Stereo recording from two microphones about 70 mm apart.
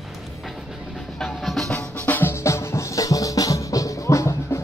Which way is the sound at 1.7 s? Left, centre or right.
Left.